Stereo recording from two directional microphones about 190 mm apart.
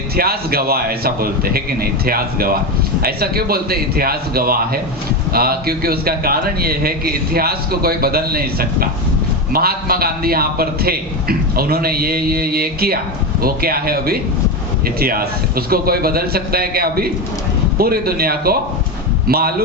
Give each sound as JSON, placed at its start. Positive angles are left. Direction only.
{"t": 0.2, "sound": "a man's voice", "side_deg": -55}